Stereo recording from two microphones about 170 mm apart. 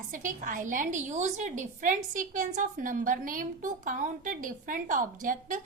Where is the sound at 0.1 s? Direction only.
50° right (ahead or behind).